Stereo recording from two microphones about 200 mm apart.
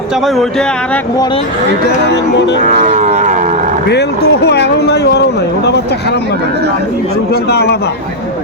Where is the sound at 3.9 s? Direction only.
55° left (ahead or behind).